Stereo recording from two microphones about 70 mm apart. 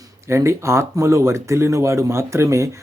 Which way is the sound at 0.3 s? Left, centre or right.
Right.